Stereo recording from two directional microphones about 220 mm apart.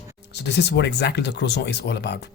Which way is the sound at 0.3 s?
50° left (ahead or behind).